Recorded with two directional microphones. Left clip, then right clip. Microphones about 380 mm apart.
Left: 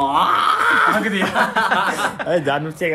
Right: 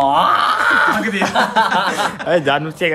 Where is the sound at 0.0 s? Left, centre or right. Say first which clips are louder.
Right 3 dB; right.